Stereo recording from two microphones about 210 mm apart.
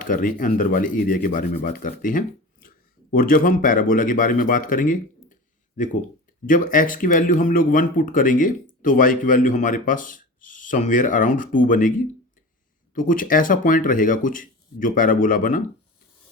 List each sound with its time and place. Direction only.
0.0 s speech: 40° left (ahead or behind)